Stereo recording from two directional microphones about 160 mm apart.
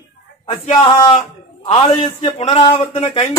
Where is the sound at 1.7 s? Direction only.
35° left (ahead or behind).